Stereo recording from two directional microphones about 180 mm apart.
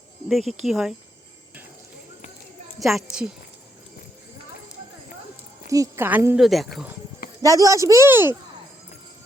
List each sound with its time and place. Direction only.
0.3 s a woman's voice: centre (ahead or behind)
2.7 s a woman's voice: centre (ahead or behind)
5.6 s speech: 20° right (ahead or behind); by 6.7 s centre (ahead or behind)
7.4 s speech: 20° right (ahead or behind)